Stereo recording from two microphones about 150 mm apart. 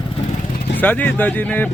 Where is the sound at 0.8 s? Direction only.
10° left (ahead or behind).